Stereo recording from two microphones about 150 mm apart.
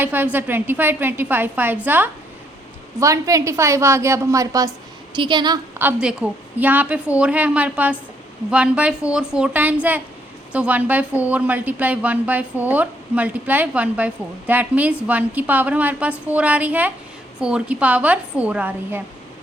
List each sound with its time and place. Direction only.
0.0 s a woman's voice: 15° right (ahead or behind); by 5.5 s 30° right (ahead or behind)
5.8 s a woman's voice: 5° right (ahead or behind)